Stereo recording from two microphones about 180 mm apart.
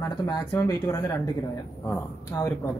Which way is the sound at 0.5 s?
15° left (ahead or behind).